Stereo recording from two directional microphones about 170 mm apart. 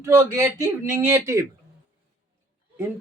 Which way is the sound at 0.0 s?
15° right (ahead or behind).